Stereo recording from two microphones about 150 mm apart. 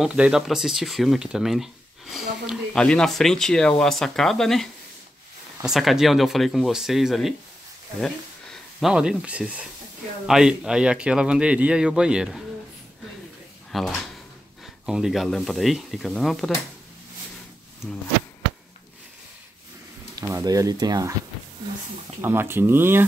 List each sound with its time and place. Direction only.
0.0 s speech: 5° right (ahead or behind)
5.7 s speech: centre (ahead or behind)
13.7 s speech: centre (ahead or behind)
20.2 s speech: 25° right (ahead or behind)
22.2 s speech: 15° right (ahead or behind)